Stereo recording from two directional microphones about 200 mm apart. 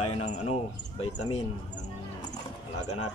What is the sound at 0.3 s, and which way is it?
Speech, 35° left (ahead or behind).